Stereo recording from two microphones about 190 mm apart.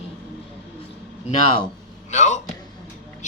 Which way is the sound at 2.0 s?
40° left (ahead or behind).